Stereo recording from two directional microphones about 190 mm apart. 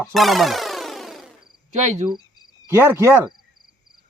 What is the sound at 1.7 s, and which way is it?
Speech, 35° right (ahead or behind).